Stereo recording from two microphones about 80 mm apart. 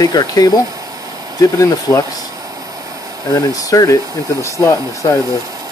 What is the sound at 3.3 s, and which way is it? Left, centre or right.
Speech, left.